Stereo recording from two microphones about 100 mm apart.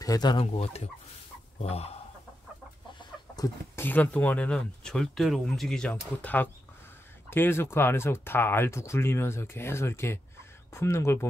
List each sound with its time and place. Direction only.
0.0 s speech: 40° left (ahead or behind)
0.4 s speech: 85° left
3.7 s speech: 20° left (ahead or behind)